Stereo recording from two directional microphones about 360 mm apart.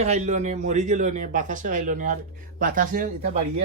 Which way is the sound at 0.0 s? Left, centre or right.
Centre.